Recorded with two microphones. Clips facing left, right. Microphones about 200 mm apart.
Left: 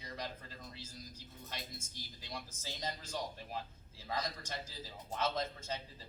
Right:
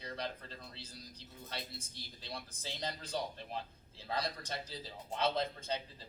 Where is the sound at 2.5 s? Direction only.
35° right (ahead or behind).